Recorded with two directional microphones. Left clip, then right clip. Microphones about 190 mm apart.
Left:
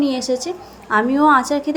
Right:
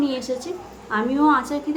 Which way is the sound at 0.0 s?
35° left (ahead or behind).